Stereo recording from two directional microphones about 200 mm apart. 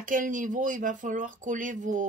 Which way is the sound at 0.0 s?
40° right (ahead or behind).